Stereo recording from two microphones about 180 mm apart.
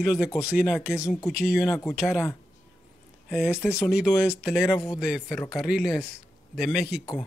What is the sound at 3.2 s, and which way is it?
Speech, 5° right (ahead or behind).